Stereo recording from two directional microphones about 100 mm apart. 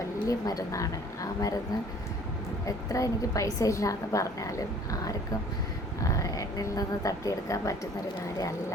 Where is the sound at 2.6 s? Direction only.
35° left (ahead or behind).